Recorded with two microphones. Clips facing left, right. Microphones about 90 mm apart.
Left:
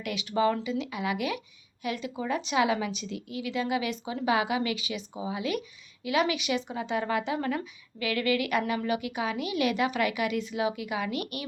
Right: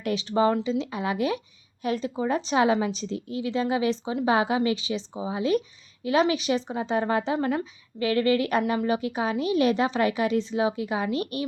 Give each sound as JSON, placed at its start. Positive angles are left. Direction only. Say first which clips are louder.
{"t": 0.0, "sound": "a woman's voice", "louder": "right 4 dB", "side_deg": -35}